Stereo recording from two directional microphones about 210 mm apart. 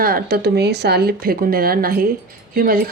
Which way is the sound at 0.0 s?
45° right (ahead or behind).